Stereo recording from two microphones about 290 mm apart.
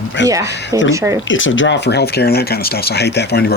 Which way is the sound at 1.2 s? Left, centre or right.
Left.